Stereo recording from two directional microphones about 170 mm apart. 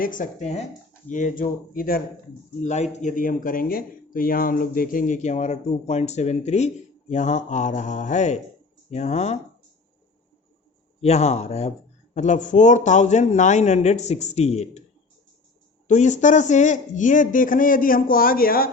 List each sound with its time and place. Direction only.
0.0 s speech: 50° left (ahead or behind)
2.6 s speech: 45° left (ahead or behind)
11.0 s speech: 40° left (ahead or behind)
15.9 s speech: 45° left (ahead or behind)